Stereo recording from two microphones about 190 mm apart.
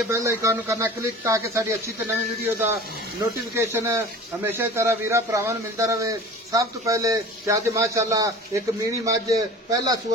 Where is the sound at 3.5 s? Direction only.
15° right (ahead or behind).